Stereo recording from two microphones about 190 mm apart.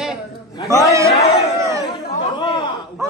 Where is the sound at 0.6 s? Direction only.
15° left (ahead or behind).